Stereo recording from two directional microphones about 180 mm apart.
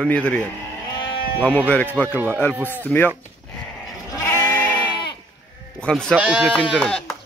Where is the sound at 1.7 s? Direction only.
10° left (ahead or behind).